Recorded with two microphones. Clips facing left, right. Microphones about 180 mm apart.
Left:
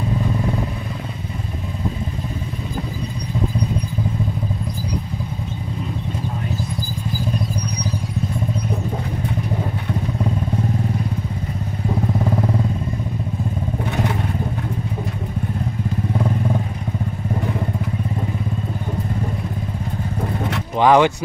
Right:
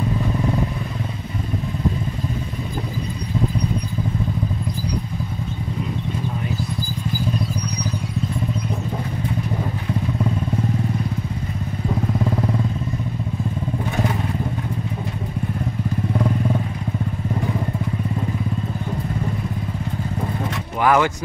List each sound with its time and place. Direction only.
20.8 s speech: 20° left (ahead or behind)